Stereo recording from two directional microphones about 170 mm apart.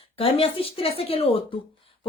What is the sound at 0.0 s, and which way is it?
A woman's voice, 35° left (ahead or behind).